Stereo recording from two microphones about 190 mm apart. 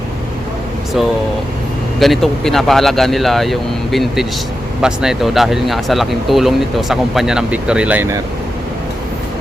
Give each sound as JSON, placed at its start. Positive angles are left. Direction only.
{"t": 2.0, "sound": "speech", "side_deg": 0}